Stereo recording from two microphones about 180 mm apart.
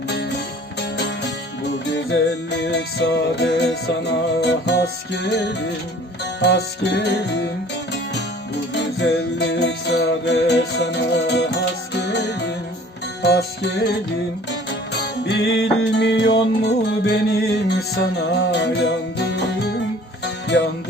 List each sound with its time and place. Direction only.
0.1 s music: 75° left (ahead or behind)
15.2 s music: 70° left (ahead or behind)